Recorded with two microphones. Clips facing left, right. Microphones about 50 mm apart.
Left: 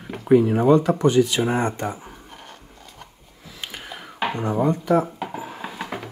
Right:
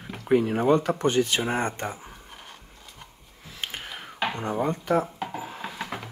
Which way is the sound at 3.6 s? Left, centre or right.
Right.